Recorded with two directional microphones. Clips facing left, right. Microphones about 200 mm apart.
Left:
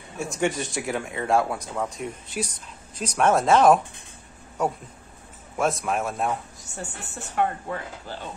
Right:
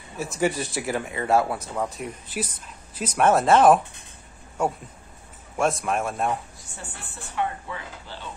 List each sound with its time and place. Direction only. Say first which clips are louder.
0.2 s speech: right 1 dB; centre (ahead or behind)
7.3 s speech: left 3 dB; 45° left (ahead or behind)